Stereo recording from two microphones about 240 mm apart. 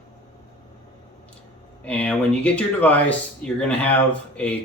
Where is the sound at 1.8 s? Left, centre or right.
Centre.